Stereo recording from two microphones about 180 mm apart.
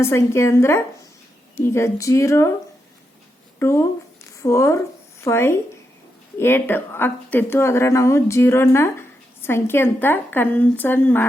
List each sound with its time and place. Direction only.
0.0 s speech: 15° left (ahead or behind)
3.6 s speech: 15° left (ahead or behind)